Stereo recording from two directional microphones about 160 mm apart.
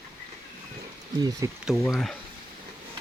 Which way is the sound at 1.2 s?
20° right (ahead or behind).